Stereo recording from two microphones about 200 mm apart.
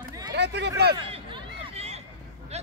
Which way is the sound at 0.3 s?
60° right (ahead or behind).